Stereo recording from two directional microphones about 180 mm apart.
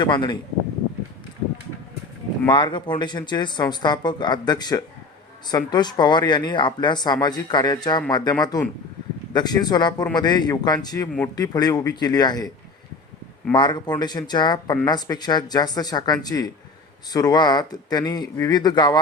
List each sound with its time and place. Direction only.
0.0 s speech: 25° left (ahead or behind)
2.5 s speech: 25° left (ahead or behind)
13.5 s speech: 25° left (ahead or behind)